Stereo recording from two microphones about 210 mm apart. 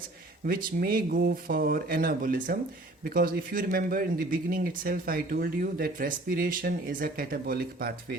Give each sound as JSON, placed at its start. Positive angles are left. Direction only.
{"t": 0.4, "sound": "a man's voice", "side_deg": -45}